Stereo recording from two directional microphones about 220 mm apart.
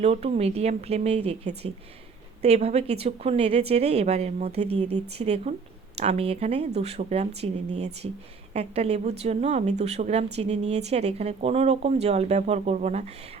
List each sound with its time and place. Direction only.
0.0 s a woman's voice: 30° right (ahead or behind)
8.5 s a woman's voice: 30° right (ahead or behind)